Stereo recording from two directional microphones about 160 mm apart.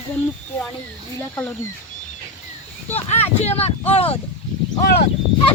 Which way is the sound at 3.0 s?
40° left (ahead or behind).